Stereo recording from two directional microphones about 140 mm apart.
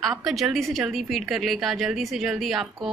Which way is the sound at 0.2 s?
Centre (ahead or behind).